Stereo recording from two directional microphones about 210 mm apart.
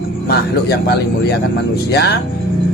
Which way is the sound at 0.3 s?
50° left (ahead or behind).